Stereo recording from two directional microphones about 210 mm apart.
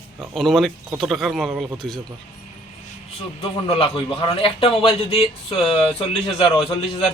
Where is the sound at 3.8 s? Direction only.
25° left (ahead or behind).